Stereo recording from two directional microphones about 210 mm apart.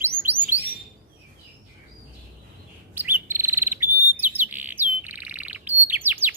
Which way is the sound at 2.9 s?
10° right (ahead or behind).